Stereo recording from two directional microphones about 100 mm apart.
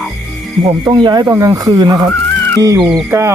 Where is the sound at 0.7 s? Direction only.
45° right (ahead or behind).